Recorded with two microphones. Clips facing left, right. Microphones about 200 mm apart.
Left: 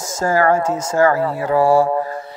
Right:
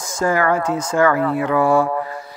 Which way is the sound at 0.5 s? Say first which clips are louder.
Left 1 dB; 25° left (ahead or behind).